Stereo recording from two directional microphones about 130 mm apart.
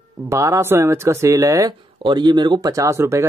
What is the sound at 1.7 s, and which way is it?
Speech, 35° right (ahead or behind).